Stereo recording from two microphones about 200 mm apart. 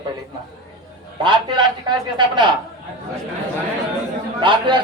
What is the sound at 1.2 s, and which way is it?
Speech, 25° right (ahead or behind).